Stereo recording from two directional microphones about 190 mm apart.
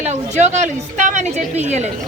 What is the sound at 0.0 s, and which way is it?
A woman's voice, 35° right (ahead or behind).